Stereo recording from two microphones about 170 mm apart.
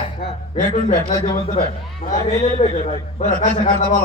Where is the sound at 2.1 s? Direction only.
45° left (ahead or behind).